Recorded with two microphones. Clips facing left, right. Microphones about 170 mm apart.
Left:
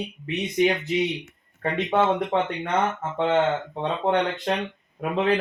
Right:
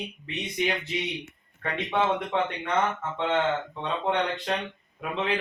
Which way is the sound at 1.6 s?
45° left (ahead or behind).